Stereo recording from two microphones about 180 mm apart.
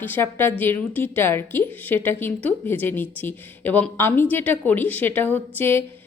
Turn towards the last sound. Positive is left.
turn(degrees=10)  # may be behind; listen again after turning